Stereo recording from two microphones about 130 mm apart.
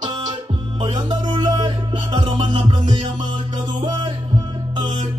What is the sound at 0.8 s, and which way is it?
Music, 35° right (ahead or behind).